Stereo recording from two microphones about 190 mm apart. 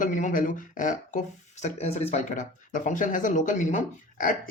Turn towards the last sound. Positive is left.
turn(degrees=45)  # may be behind; listen again after turning